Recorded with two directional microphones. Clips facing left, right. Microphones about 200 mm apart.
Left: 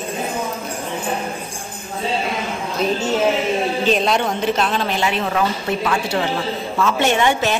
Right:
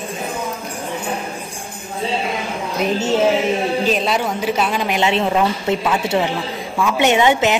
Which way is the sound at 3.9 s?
5° right (ahead or behind).